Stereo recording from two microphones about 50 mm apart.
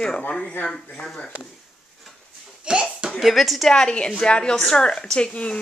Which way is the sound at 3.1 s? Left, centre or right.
Centre.